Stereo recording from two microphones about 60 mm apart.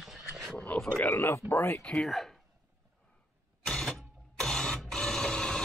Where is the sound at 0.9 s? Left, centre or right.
Left.